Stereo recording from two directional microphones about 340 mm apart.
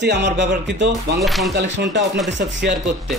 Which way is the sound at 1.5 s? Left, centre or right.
Right.